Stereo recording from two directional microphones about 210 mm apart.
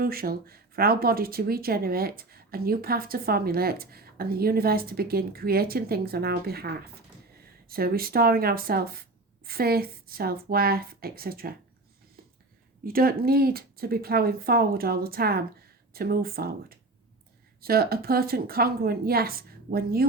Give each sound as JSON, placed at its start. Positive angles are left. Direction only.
{"t": 0.0, "sound": "speech", "side_deg": -45}
{"t": 12.8, "sound": "speech", "side_deg": -45}